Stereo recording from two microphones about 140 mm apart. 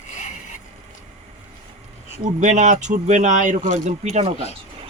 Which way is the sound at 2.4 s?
60° right (ahead or behind).